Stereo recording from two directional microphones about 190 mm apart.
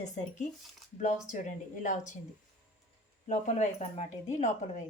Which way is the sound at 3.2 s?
40° left (ahead or behind).